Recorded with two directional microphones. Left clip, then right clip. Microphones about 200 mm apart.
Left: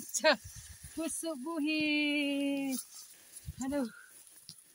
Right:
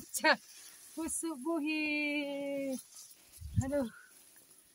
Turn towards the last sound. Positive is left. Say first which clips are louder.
# right 1 dB
turn(degrees=15)  # may be behind; listen again after turning